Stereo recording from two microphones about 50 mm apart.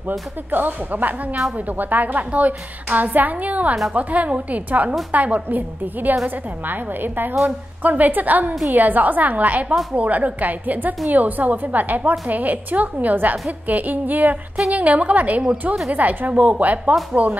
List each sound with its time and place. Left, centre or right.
0.5 s a woman's voice: right